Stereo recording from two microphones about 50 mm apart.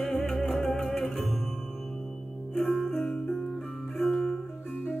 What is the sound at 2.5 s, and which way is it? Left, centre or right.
Music, centre.